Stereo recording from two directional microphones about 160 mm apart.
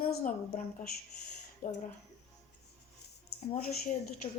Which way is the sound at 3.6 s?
55° left (ahead or behind).